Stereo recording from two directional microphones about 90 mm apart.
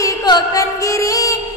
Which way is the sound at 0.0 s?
45° left (ahead or behind).